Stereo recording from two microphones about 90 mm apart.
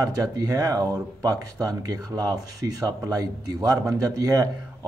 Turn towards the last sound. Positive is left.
turn(degrees=-40)  # may be behind; listen again after turning